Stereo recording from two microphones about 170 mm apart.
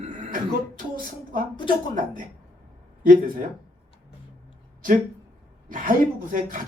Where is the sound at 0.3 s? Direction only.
55° right (ahead or behind).